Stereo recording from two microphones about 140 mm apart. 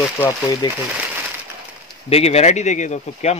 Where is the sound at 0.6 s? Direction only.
30° left (ahead or behind).